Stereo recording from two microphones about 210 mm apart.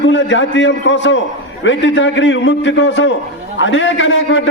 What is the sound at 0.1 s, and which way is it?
A man's voice, 60° left (ahead or behind).